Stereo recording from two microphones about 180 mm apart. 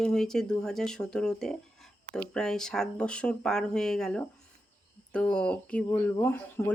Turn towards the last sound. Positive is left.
turn(degrees=10)  # may be behind; listen again after turning